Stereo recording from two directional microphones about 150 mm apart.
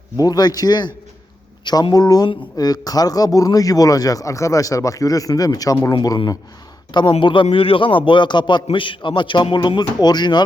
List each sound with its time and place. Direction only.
0.2 s a man's voice: 25° left (ahead or behind)